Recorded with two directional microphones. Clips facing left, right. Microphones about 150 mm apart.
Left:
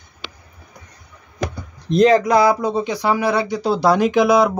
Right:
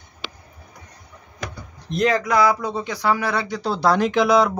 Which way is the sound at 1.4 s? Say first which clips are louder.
Left 8 dB; 30° left (ahead or behind).